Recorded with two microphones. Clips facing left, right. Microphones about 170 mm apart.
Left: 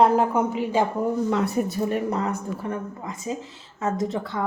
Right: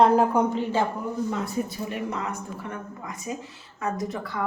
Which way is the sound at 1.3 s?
70° left (ahead or behind).